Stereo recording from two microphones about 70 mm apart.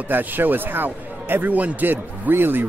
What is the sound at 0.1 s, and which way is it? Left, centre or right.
Speech, right.